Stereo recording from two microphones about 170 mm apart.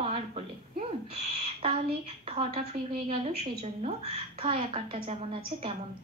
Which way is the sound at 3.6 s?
40° right (ahead or behind).